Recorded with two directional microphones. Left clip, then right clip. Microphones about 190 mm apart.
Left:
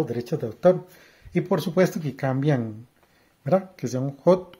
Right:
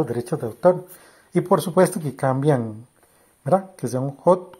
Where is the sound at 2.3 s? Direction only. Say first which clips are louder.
Right 5 dB; centre (ahead or behind).